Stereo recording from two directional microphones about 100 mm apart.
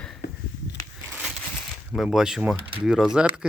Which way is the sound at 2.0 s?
5° right (ahead or behind).